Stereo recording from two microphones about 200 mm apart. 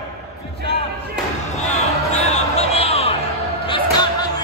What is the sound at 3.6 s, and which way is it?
Music, 25° left (ahead or behind).